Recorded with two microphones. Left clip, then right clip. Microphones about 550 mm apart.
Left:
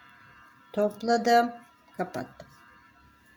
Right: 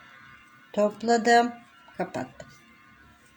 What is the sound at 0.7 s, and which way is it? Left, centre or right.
Speech, left.